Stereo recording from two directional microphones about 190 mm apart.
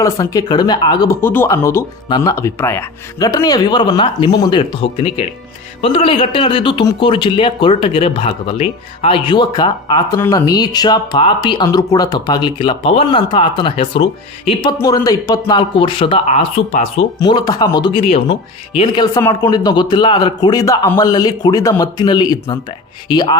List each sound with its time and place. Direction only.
0.0 s speech: 20° left (ahead or behind)